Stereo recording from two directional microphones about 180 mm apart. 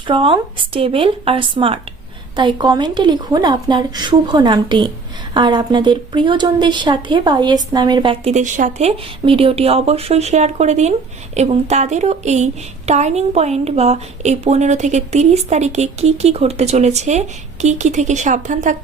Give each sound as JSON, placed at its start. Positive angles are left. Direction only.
{"t": 0.1, "sound": "a woman's voice", "side_deg": -30}
{"t": 9.2, "sound": "a woman's voice", "side_deg": -30}